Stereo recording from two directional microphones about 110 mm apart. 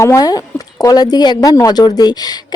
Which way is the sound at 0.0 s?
30° left (ahead or behind).